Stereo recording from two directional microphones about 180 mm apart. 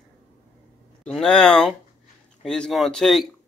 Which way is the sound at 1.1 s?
5° left (ahead or behind).